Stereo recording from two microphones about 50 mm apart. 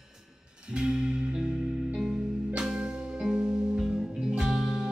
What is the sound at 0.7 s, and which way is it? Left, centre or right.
Music, centre.